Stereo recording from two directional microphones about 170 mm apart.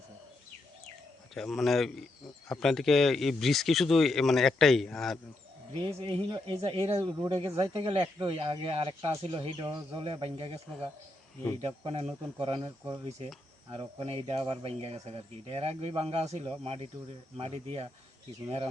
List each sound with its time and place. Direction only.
1.3 s speech: centre (ahead or behind)
5.8 s speech: 30° right (ahead or behind)